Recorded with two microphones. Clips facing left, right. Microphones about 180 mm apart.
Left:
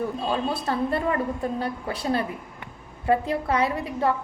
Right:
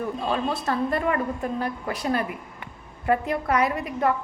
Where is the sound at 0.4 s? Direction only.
30° left (ahead or behind).